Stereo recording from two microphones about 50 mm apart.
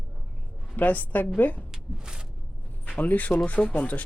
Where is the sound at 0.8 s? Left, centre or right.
Left.